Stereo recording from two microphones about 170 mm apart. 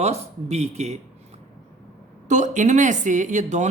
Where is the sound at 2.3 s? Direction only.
45° right (ahead or behind).